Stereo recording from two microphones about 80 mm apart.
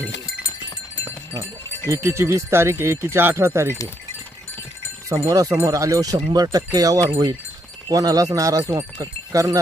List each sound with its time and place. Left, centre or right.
1.9 s speech: right
5.0 s speech: right